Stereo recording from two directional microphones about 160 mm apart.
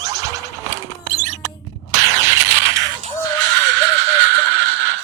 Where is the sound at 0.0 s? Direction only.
20° right (ahead or behind).